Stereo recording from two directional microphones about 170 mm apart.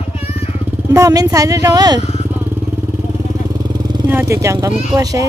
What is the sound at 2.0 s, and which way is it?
Vehicle, 40° left (ahead or behind).